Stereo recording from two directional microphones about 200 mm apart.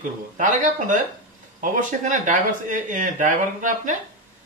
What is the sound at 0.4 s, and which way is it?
Speech, 40° right (ahead or behind).